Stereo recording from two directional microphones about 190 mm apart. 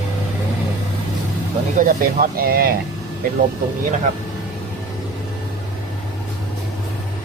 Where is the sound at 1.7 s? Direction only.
50° right (ahead or behind).